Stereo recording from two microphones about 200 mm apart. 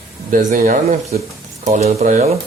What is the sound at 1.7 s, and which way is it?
Speech, 30° right (ahead or behind).